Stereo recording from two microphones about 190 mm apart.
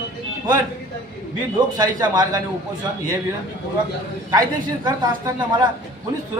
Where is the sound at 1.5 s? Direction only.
20° right (ahead or behind).